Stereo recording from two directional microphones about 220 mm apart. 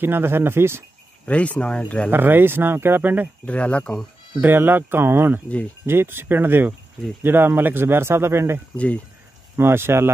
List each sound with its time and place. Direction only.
0.0 s speech: 10° right (ahead or behind)
1.2 s speech: 5° left (ahead or behind)
2.0 s speech: 10° right (ahead or behind)
3.4 s speech: 5° left (ahead or behind)
4.4 s speech: 10° right (ahead or behind)
8.7 s speech: 5° left (ahead or behind)
9.6 s speech: 10° right (ahead or behind)